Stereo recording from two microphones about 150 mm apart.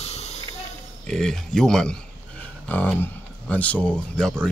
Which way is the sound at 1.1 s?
5° left (ahead or behind).